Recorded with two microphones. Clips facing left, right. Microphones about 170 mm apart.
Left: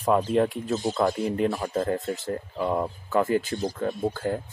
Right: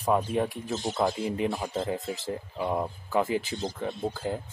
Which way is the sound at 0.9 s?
15° right (ahead or behind).